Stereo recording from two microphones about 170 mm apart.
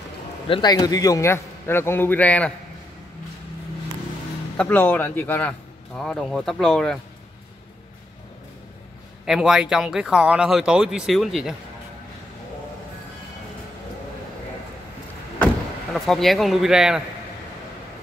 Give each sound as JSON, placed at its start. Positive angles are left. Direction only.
{"t": 0.5, "sound": "a man's voice", "side_deg": 25}
{"t": 4.6, "sound": "a man's voice", "side_deg": 10}
{"t": 9.2, "sound": "speech", "side_deg": -5}
{"t": 15.3, "sound": "speech", "side_deg": 5}